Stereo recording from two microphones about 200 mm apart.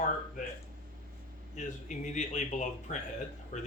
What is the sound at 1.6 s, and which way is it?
A man's voice, 35° left (ahead or behind).